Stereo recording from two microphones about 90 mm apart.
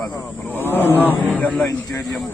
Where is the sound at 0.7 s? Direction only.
20° left (ahead or behind).